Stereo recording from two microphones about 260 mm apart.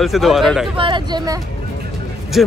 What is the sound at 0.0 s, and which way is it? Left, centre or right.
Speech, centre.